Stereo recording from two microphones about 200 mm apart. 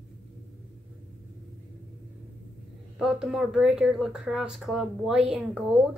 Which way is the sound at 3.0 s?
Centre (ahead or behind).